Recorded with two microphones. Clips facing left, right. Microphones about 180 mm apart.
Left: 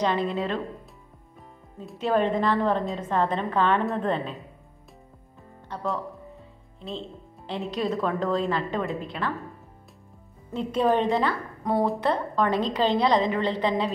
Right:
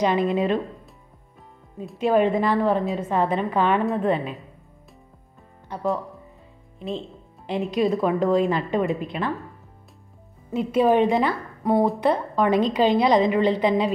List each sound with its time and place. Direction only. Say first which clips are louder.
0.0 s a woman's voice: right 4 dB; 15° right (ahead or behind)
2.0 s a woman's voice: right 4 dB; 10° right (ahead or behind)
5.7 s a woman's voice: right 4 dB; 10° right (ahead or behind)
10.5 s a woman's voice: right 4 dB; 10° right (ahead or behind)